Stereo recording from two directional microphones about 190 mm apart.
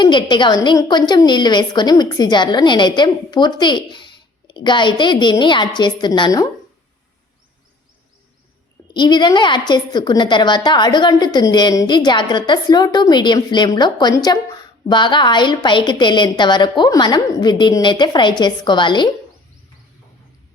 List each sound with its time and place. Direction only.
0.0 s a woman's voice: 25° left (ahead or behind)
8.9 s a woman's voice: 25° left (ahead or behind)